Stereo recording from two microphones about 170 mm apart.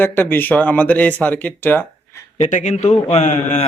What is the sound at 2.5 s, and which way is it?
Speech, 45° left (ahead or behind).